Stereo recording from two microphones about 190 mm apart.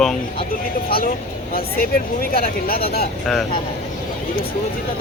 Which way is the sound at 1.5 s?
50° left (ahead or behind).